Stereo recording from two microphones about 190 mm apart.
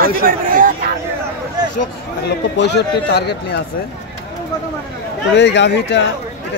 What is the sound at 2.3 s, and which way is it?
Speech, 65° left (ahead or behind).